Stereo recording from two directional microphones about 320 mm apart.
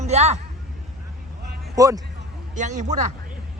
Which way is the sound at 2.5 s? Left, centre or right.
Right.